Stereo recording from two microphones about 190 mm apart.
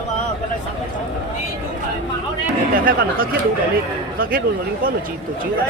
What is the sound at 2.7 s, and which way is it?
Speech, 50° right (ahead or behind).